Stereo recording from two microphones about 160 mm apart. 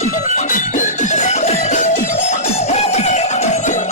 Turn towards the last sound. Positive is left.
turn(degrees=50)  # may be behind; listen again after turning